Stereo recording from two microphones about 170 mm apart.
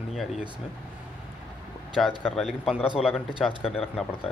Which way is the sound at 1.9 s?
Centre (ahead or behind).